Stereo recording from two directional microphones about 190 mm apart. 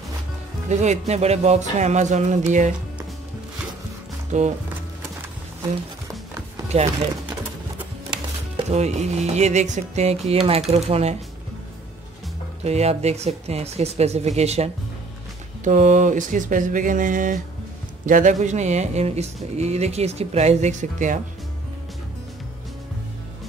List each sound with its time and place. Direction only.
0.7 s speech: 40° right (ahead or behind)
4.3 s speech: 40° right (ahead or behind)
8.6 s speech: 35° right (ahead or behind)
12.6 s speech: 35° right (ahead or behind)